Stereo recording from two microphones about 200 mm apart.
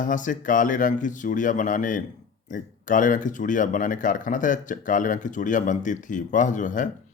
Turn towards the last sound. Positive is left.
turn(degrees=40)  # may be behind; listen again after turning